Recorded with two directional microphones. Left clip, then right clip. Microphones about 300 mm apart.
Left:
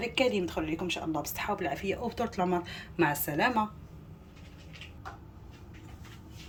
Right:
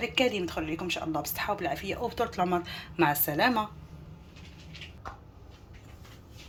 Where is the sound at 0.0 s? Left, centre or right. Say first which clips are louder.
Right 1 dB; centre.